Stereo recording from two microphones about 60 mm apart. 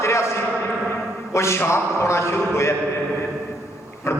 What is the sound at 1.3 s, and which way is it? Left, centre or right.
A man's voice, left.